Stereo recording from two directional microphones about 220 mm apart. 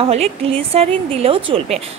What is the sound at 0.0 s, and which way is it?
A woman's voice, 25° right (ahead or behind).